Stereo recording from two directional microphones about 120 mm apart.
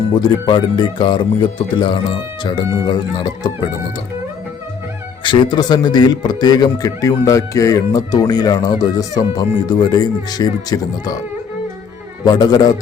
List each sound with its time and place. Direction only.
0.1 s a man's voice: 40° left (ahead or behind)
5.2 s a man's voice: 45° left (ahead or behind)
12.2 s a man's voice: 35° left (ahead or behind)